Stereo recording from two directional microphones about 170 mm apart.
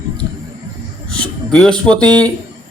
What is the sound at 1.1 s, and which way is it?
Speech, 5° left (ahead or behind).